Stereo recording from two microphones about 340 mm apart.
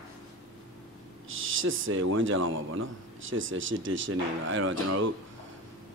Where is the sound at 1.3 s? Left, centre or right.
Right.